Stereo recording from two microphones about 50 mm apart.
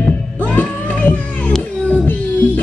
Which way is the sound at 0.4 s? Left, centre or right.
Left.